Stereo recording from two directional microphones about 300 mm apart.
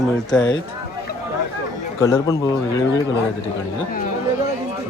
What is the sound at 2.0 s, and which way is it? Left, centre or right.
Speech, centre.